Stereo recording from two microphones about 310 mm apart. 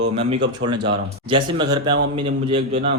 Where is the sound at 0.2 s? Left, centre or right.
Centre.